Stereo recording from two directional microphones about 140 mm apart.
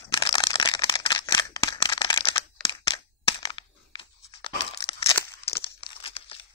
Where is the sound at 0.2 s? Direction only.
35° left (ahead or behind).